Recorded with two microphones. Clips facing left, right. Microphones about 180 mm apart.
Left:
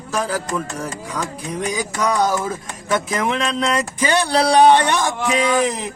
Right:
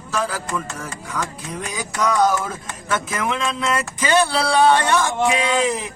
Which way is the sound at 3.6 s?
15° left (ahead or behind).